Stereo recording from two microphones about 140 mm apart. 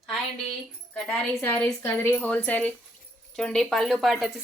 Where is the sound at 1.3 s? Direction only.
15° left (ahead or behind).